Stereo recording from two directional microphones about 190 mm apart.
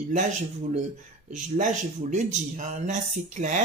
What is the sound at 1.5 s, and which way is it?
Speech, 40° right (ahead or behind).